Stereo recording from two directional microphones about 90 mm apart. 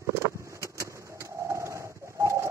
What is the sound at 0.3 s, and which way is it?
Pigeon, 35° right (ahead or behind).